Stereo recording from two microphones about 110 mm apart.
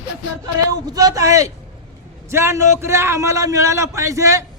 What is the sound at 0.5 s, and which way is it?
Speech, 35° right (ahead or behind).